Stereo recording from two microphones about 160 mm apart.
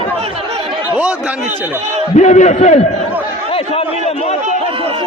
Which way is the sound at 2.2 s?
45° left (ahead or behind).